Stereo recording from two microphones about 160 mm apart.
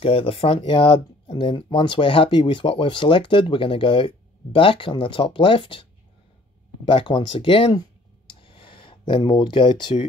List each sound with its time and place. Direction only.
0.0 s speech: 35° left (ahead or behind)
6.9 s speech: 30° left (ahead or behind)
8.3 s a sound: 35° left (ahead or behind)